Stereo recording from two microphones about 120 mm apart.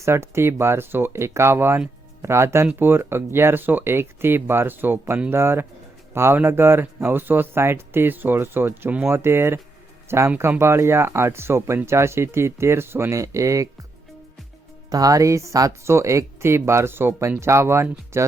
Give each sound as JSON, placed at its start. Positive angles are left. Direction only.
{"t": 0.0, "sound": "speech", "side_deg": -20}
{"t": 14.8, "sound": "speech", "side_deg": -30}